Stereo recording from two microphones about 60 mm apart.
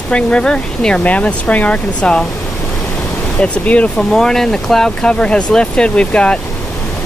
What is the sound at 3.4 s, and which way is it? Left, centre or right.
Speech, left.